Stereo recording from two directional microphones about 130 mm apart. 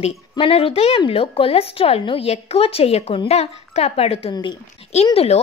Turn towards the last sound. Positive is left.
turn(degrees=55)  # may be behind; listen again after turning